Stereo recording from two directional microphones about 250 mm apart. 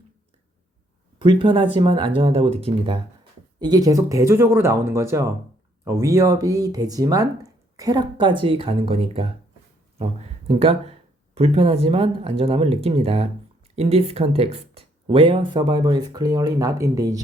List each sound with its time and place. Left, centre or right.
1.2 s speech: centre